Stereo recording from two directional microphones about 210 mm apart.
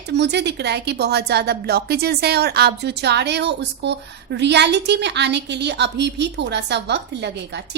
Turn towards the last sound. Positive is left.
turn(degrees=-55)  # may be behind; listen again after turning